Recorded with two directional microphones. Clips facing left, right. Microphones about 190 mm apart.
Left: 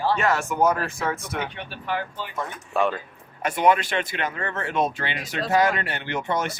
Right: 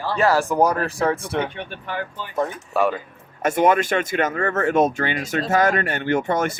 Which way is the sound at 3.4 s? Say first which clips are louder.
Right 3 dB; 45° right (ahead or behind).